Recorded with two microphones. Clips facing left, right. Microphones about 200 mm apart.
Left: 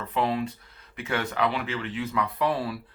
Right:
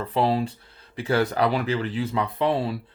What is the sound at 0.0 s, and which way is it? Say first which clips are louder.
Speech: right 4 dB; 35° right (ahead or behind).